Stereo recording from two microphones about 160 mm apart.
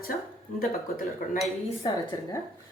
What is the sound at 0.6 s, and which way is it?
Speech, 60° left (ahead or behind).